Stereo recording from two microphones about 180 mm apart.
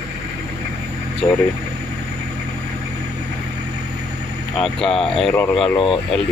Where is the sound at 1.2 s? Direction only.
5° left (ahead or behind).